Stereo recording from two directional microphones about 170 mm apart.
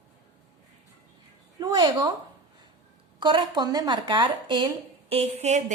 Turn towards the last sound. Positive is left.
turn(degrees=-40)  # may be behind; listen again after turning